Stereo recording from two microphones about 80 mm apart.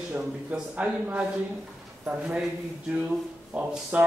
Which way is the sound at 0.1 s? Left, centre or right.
Centre.